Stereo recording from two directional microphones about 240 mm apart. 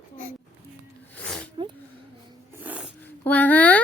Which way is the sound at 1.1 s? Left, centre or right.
Centre.